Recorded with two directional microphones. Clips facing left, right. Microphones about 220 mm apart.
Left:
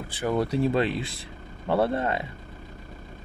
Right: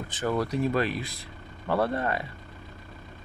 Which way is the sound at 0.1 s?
10° left (ahead or behind).